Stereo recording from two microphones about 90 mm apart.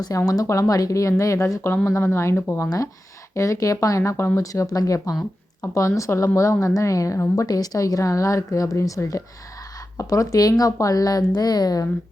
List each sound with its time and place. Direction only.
0.0 s a woman's voice: 40° left (ahead or behind)
2.6 s a woman's voice: 40° left (ahead or behind)